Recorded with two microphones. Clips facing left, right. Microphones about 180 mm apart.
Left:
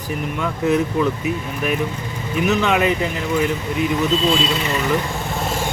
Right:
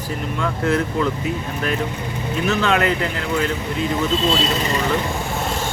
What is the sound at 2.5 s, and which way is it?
Speech, 15° left (ahead or behind).